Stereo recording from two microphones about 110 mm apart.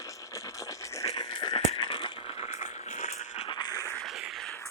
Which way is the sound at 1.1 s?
40° left (ahead or behind).